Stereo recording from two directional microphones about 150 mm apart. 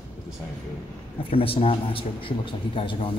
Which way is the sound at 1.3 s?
40° left (ahead or behind).